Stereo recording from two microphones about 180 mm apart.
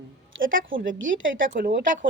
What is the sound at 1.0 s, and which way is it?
Speech, 90° right.